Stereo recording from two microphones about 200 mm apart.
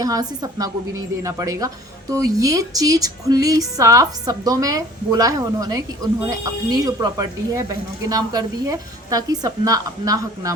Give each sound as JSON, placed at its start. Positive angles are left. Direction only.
{"t": 0.0, "sound": "a woman's voice", "side_deg": -20}